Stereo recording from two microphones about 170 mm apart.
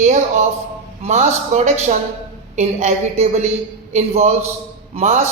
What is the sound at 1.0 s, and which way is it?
A man's voice, 40° right (ahead or behind).